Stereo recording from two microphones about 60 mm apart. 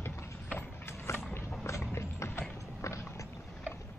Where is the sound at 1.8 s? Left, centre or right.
Left.